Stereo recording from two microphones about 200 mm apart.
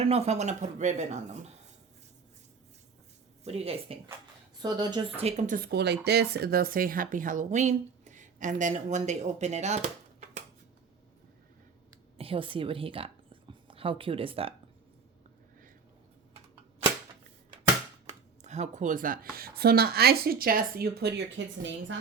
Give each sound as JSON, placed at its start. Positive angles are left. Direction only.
{"t": 0.0, "sound": "speech", "side_deg": -30}
{"t": 3.4, "sound": "speech", "side_deg": -30}
{"t": 5.2, "sound": "speech", "side_deg": -40}
{"t": 12.1, "sound": "a woman's voice", "side_deg": -30}
{"t": 18.4, "sound": "speech", "side_deg": -35}